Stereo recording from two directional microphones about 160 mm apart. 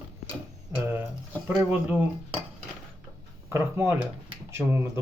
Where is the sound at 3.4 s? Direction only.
15° right (ahead or behind).